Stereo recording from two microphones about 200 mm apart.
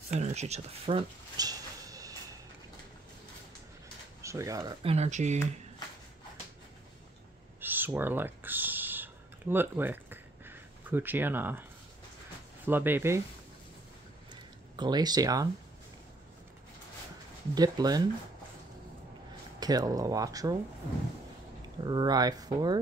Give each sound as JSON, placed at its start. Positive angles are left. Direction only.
{"t": 0.1, "sound": "speech", "side_deg": -35}
{"t": 4.2, "sound": "speech", "side_deg": -15}
{"t": 4.8, "sound": "speech", "side_deg": -35}
{"t": 7.6, "sound": "a sound", "side_deg": -10}
{"t": 12.6, "sound": "speech", "side_deg": -10}
{"t": 14.3, "sound": "a sound", "side_deg": -20}
{"t": 17.6, "sound": "speech", "side_deg": -20}
{"t": 19.6, "sound": "speech", "side_deg": -20}
{"t": 21.8, "sound": "speech", "side_deg": -20}